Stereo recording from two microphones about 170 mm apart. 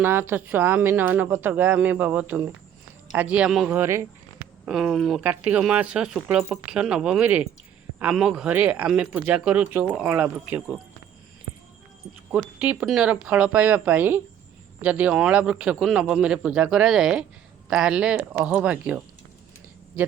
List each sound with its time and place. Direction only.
0.0 s speech: 10° right (ahead or behind)
3.8 s speech: 15° right (ahead or behind)
4.6 s speech: centre (ahead or behind)
12.4 s speech: 5° right (ahead or behind)